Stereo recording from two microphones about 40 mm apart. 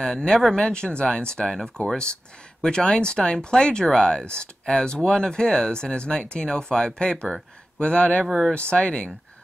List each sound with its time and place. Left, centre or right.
0.0 s speech: centre